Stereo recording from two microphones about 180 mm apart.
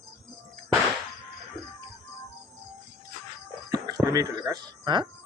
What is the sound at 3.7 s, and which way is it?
Music, 20° right (ahead or behind).